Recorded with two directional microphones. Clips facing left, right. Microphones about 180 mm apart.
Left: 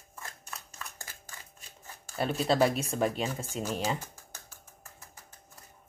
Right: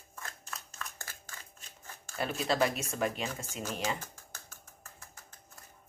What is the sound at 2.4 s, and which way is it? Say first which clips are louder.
Speech: left 4 dB; 30° left (ahead or behind).